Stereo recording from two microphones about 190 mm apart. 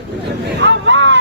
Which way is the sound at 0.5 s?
70° right (ahead or behind).